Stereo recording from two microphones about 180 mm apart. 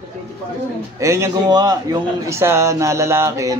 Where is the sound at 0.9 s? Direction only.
15° right (ahead or behind).